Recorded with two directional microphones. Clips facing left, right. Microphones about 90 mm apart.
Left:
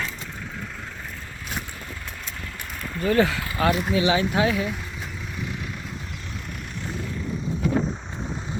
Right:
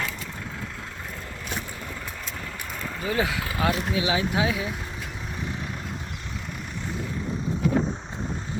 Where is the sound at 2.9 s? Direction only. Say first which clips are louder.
Left 6 dB; 15° right (ahead or behind).